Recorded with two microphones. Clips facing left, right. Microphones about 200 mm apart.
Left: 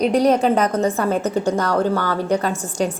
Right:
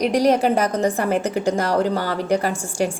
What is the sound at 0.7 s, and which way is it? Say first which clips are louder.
Speech: left 1 dB; 30° right (ahead or behind).